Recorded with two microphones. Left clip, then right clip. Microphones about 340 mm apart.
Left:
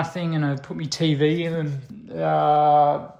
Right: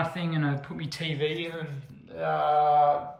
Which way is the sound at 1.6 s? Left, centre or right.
Centre.